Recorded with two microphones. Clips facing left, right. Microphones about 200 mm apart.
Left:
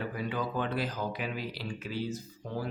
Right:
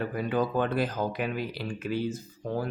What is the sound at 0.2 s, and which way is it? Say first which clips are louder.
Speech: right 7 dB; 50° right (ahead or behind).